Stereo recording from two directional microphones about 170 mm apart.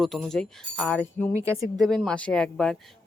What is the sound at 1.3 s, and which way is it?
Speech, 15° right (ahead or behind).